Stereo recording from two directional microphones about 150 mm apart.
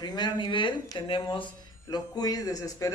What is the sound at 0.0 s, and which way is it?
Speech, 30° left (ahead or behind).